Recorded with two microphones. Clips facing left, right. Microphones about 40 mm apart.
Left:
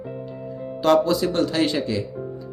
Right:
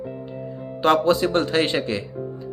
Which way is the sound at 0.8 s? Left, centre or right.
Right.